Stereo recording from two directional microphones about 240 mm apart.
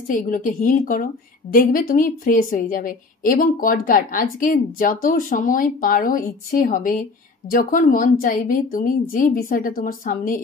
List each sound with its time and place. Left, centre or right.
0.3 s a woman's voice: left